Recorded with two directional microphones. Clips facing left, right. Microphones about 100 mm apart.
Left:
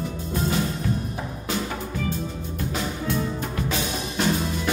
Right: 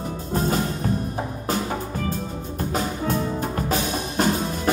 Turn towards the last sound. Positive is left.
turn(degrees=-40)  # may be behind; listen again after turning